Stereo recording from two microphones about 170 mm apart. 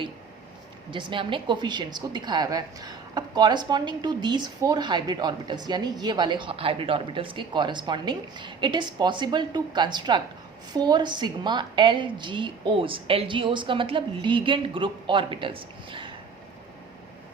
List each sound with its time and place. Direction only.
0.9 s a woman's voice: 30° right (ahead or behind)